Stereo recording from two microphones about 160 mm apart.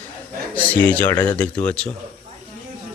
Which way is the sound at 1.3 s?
10° left (ahead or behind).